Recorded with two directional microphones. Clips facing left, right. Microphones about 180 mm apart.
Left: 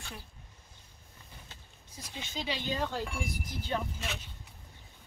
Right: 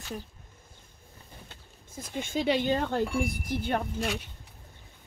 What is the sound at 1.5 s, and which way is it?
Speech, 50° right (ahead or behind).